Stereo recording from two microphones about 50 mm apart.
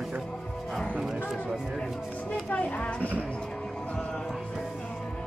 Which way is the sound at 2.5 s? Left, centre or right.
Left.